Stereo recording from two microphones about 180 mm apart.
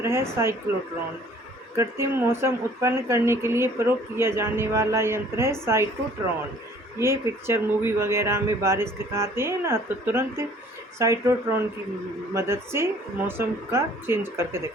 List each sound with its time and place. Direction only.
0.0 s a woman's voice: 15° right (ahead or behind)
1.7 s a woman's voice: 15° right (ahead or behind)
7.0 s a woman's voice: 15° right (ahead or behind)